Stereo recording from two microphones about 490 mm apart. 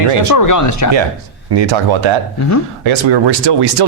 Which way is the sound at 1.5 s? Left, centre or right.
Right.